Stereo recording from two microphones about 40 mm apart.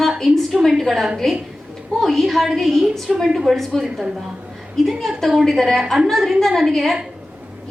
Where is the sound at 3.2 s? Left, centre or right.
Centre.